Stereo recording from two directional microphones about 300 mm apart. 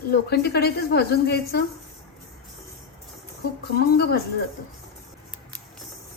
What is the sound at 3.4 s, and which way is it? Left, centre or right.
Speech, left.